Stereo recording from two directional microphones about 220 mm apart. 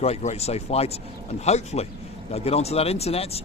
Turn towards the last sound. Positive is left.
turn(degrees=25)  # may be behind; listen again after turning